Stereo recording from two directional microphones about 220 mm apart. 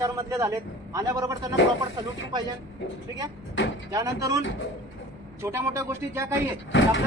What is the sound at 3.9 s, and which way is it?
Speech, 15° right (ahead or behind).